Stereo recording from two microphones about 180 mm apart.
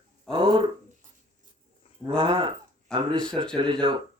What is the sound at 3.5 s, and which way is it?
Speech, 30° right (ahead or behind).